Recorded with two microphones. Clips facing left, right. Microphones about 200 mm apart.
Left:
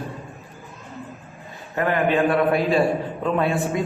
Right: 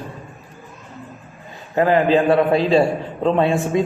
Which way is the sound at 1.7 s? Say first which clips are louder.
Right 5 dB; 30° right (ahead or behind).